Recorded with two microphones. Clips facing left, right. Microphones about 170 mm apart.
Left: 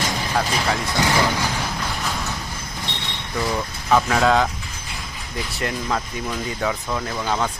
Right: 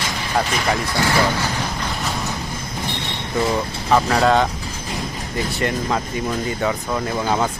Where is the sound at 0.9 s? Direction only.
20° left (ahead or behind).